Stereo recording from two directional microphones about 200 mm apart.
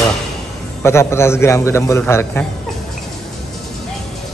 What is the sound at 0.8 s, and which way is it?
A man's voice, 15° left (ahead or behind).